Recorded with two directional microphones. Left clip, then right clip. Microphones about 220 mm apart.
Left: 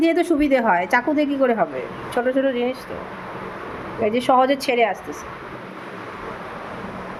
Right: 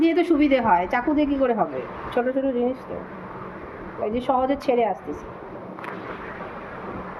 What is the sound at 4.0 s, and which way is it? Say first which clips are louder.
Speech: left 6 dB; 20° left (ahead or behind).